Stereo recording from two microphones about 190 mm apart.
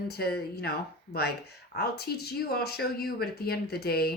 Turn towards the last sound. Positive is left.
turn(degrees=55)  # may be behind; listen again after turning